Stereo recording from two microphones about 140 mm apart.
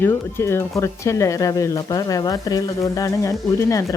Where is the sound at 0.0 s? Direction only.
15° left (ahead or behind).